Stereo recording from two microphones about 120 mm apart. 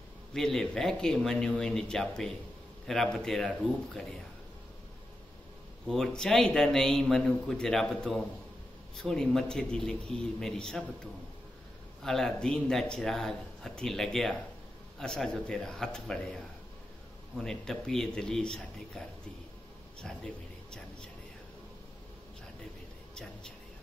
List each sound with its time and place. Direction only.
0.3 s a man's voice: 5° left (ahead or behind)
5.9 s a man's voice: 5° left (ahead or behind)
12.0 s a man's voice: 5° left (ahead or behind)
17.4 s a man's voice: 5° left (ahead or behind)